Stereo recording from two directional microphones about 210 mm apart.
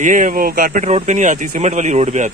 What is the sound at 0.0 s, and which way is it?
Speech, 40° right (ahead or behind).